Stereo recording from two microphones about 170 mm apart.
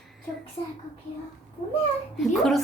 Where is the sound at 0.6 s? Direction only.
35° left (ahead or behind).